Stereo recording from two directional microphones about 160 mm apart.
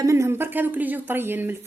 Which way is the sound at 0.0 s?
15° right (ahead or behind).